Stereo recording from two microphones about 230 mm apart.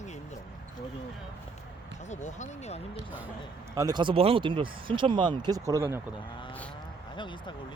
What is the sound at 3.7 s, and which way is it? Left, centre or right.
Speech, centre.